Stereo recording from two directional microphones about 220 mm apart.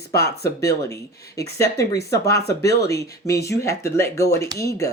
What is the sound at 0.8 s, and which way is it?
Speech, 15° left (ahead or behind).